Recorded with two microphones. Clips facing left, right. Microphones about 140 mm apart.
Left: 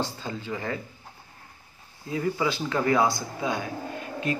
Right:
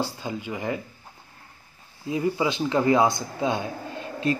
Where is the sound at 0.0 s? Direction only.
10° right (ahead or behind).